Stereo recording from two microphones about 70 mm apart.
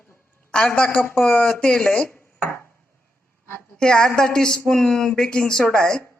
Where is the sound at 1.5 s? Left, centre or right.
Centre; by 2.7 s left.